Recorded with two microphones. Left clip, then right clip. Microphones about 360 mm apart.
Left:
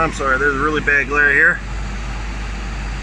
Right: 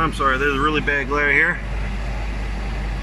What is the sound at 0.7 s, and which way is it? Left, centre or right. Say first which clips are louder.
Speech: left 5 dB; left.